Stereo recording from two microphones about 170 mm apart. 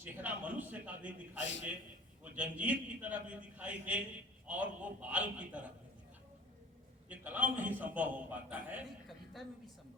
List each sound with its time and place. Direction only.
0.0 s a man's voice: 10° right (ahead or behind)
1.4 s a man's voice: 90° left
2.2 s a man's voice: 10° right (ahead or behind)
7.1 s a man's voice: 10° right (ahead or behind)